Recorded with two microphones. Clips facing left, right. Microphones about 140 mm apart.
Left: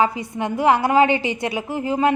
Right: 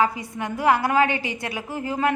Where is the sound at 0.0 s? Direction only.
25° left (ahead or behind).